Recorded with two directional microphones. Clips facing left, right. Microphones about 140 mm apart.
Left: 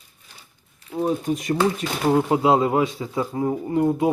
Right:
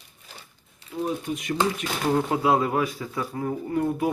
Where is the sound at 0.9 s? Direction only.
30° left (ahead or behind).